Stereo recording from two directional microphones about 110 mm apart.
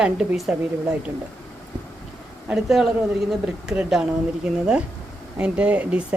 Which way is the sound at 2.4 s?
5° right (ahead or behind).